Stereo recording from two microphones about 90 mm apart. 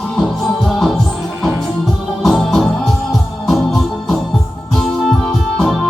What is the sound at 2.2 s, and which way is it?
Organ, 5° left (ahead or behind).